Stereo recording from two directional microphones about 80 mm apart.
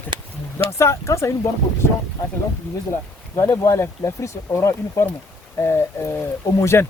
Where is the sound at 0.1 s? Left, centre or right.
Right.